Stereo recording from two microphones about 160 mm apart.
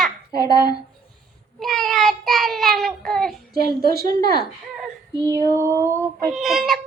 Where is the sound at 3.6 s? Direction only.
70° right (ahead or behind).